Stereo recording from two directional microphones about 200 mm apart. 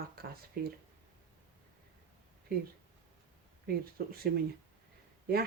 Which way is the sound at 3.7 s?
50° right (ahead or behind).